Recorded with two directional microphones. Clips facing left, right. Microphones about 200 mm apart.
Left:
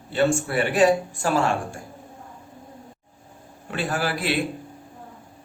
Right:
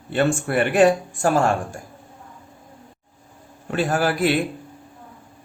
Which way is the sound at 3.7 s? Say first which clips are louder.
Right 5 dB; 45° right (ahead or behind).